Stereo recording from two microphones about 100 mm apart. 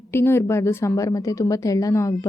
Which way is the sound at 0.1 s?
25° left (ahead or behind).